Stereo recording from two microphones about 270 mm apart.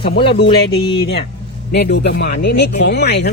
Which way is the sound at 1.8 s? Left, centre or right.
Left.